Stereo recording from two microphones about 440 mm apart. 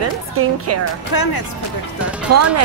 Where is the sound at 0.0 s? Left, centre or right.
Right.